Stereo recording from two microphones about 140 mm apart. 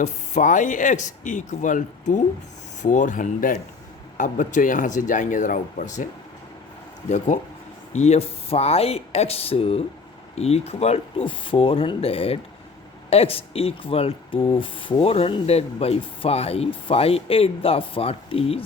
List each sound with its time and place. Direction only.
0.0 s speech: 60° left (ahead or behind)
7.3 s speech: 65° left (ahead or behind)
7.9 s speech: 50° left (ahead or behind)